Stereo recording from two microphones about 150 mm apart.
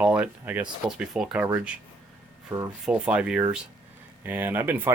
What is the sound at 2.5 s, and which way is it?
Speech, 15° right (ahead or behind).